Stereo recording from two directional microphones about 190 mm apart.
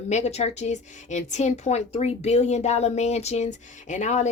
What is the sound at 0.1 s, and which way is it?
A woman's voice, 35° left (ahead or behind).